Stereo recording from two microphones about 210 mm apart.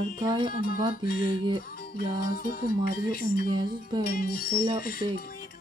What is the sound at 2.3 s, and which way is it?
Music, 45° left (ahead or behind).